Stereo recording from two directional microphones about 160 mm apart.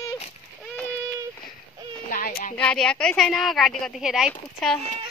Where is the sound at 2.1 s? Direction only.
65° left (ahead or behind).